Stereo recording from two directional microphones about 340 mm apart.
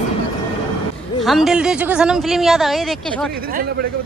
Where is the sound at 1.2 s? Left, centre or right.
Centre.